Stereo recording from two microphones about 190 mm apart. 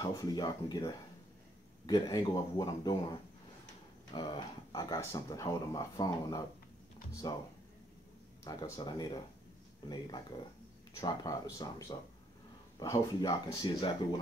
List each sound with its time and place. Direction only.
0.0 s speech: 20° left (ahead or behind)
8.5 s speech: 20° left (ahead or behind)
11.0 s speech: 20° left (ahead or behind)